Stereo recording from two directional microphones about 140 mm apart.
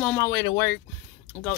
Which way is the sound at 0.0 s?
15° left (ahead or behind).